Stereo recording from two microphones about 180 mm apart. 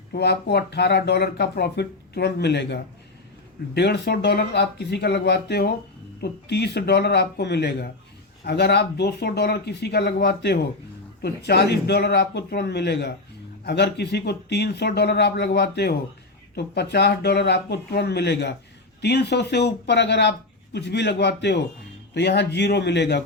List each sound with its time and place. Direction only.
0.1 s speech: 65° left (ahead or behind)